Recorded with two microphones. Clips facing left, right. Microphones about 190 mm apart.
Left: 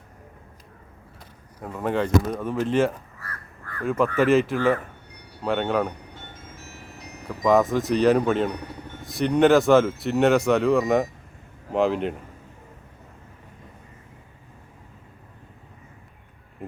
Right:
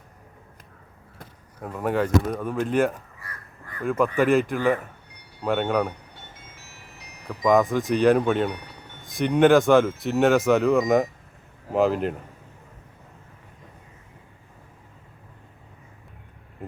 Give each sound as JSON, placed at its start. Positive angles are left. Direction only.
{"t": 1.6, "sound": "speech", "side_deg": -5}
{"t": 3.2, "sound": "crow", "side_deg": -15}
{"t": 3.8, "sound": "speech", "side_deg": 0}
{"t": 4.5, "sound": "speech", "side_deg": -15}
{"t": 5.4, "sound": "speech", "side_deg": 0}
{"t": 7.3, "sound": "speech", "side_deg": 0}